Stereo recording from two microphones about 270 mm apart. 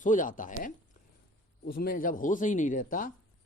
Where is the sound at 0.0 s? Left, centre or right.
Left.